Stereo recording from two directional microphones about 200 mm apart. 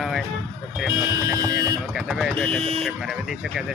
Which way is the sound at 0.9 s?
15° right (ahead or behind).